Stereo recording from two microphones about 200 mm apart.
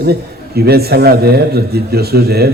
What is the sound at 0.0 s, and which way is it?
Mantra, 50° right (ahead or behind).